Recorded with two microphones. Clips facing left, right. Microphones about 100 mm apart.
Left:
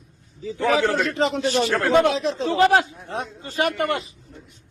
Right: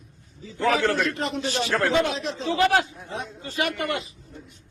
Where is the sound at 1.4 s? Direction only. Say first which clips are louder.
Left 3 dB; 45° left (ahead or behind).